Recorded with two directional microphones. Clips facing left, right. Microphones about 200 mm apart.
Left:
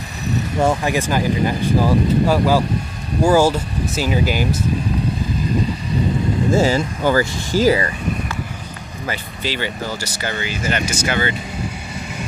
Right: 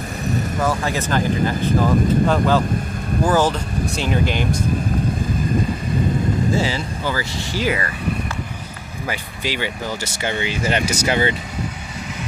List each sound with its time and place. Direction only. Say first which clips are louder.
0.8 s speech: left 2 dB; 10° left (ahead or behind)
6.5 s speech: left 5 dB; 45° left (ahead or behind)
9.0 s speech: left 1 dB; 15° right (ahead or behind)
10.0 s speech: right 2 dB; 25° right (ahead or behind)